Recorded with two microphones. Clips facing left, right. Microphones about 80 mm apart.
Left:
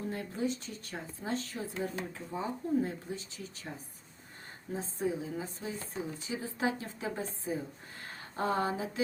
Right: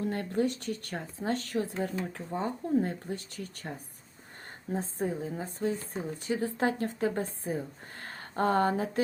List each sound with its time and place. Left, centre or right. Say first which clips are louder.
0.1 s speech: right 5 dB; right
4.7 s speech: right 2 dB; right
8.0 s a sound: right 5 dB; right